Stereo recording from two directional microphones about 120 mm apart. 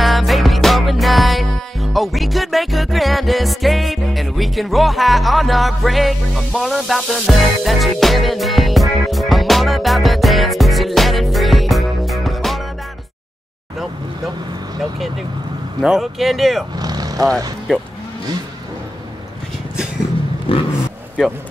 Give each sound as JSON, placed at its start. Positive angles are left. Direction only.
{"t": 0.0, "sound": "music", "side_deg": 0}
{"t": 15.8, "sound": "speech", "side_deg": -5}
{"t": 16.7, "sound": "speech", "side_deg": -35}
{"t": 20.5, "sound": "vehicle", "side_deg": 45}